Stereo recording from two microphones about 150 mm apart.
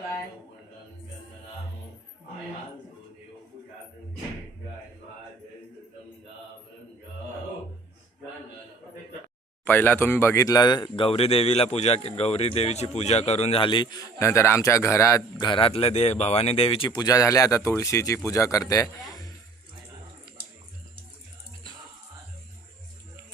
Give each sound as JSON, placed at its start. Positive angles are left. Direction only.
{"t": 9.6, "sound": "speech", "side_deg": 15}
{"t": 16.9, "sound": "speech", "side_deg": 25}